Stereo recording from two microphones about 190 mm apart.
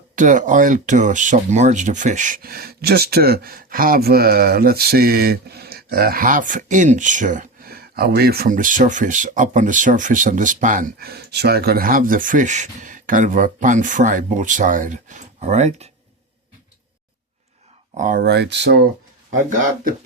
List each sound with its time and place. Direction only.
0.2 s speech: 40° right (ahead or behind)
17.9 s speech: 45° right (ahead or behind); by 18.9 s 65° right (ahead or behind)